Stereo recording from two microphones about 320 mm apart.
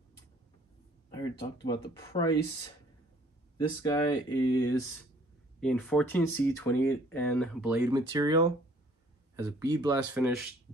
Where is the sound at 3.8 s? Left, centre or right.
Centre.